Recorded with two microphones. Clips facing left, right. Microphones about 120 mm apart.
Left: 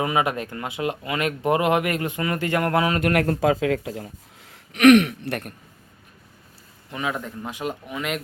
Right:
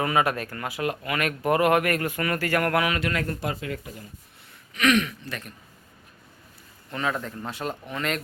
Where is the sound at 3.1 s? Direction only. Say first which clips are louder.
Left 9 dB; 80° left; by 5.5 s 60° left (ahead or behind).